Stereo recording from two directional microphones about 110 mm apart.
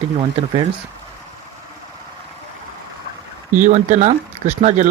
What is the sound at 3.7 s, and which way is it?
Speech, 90° right.